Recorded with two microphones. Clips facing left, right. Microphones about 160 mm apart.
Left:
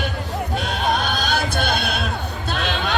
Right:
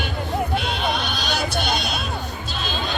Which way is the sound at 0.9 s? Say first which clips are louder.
Left 4 dB; 50° left (ahead or behind).